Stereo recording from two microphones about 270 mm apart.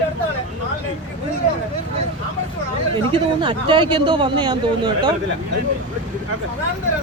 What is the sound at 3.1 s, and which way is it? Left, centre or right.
Speech, centre.